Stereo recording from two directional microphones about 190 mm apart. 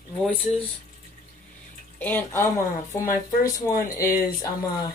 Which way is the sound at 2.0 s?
10° left (ahead or behind).